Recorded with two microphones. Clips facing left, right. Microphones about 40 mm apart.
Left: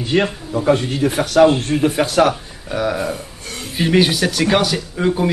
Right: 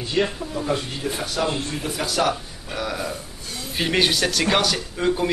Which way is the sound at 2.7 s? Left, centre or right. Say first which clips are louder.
Left 8 dB; centre.